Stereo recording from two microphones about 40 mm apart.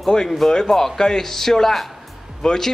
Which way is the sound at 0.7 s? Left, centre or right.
Centre.